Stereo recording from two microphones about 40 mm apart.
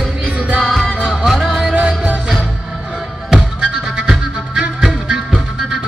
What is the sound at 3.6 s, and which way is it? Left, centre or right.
Music, centre.